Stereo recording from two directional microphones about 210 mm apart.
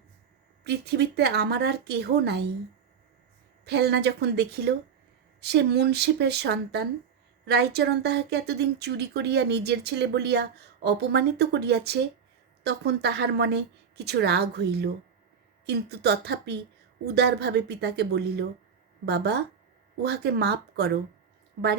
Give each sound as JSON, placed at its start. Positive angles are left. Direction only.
{"t": 0.6, "sound": "speech", "side_deg": -50}
{"t": 3.6, "sound": "speech", "side_deg": -50}